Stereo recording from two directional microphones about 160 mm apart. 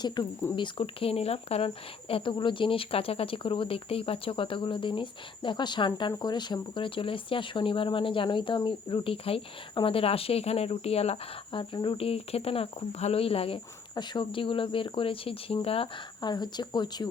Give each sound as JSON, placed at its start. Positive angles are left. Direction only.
{"t": 0.2, "sound": "speech", "side_deg": 25}